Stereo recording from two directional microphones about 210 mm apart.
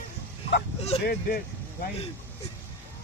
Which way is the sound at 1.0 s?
50° left (ahead or behind).